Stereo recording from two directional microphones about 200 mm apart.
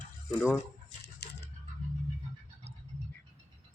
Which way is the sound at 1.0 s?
55° left (ahead or behind).